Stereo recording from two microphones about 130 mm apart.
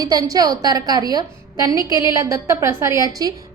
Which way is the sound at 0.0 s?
30° right (ahead or behind).